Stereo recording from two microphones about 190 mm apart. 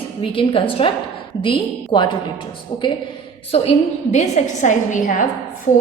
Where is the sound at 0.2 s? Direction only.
30° left (ahead or behind).